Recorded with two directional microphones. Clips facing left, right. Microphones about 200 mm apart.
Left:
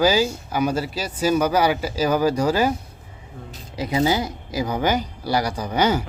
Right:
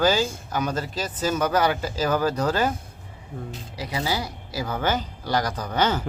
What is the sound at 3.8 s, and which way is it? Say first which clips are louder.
Speech: left 7 dB; 20° left (ahead or behind).